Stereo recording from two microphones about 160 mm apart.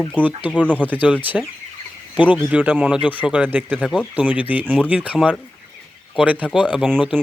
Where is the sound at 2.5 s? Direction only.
10° right (ahead or behind).